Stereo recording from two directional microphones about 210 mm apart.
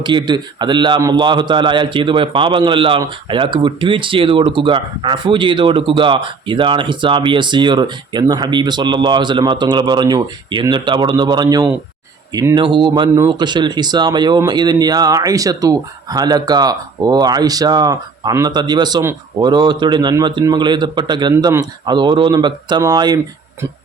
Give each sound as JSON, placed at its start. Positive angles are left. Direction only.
{"t": 0.0, "sound": "a man's voice", "side_deg": -20}